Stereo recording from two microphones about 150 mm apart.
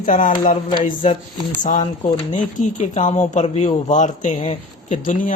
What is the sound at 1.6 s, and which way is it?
A man's voice, 55° left (ahead or behind).